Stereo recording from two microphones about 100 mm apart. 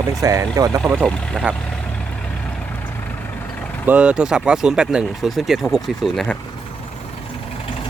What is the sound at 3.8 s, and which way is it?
Speech, 10° right (ahead or behind).